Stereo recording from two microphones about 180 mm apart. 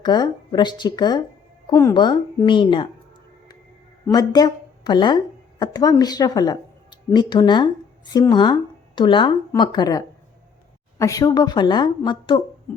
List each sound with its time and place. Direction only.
0.0 s a woman's voice: 25° left (ahead or behind)
4.1 s a woman's voice: 20° left (ahead or behind)